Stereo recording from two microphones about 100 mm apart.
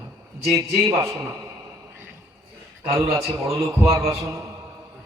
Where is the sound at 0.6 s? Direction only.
30° right (ahead or behind).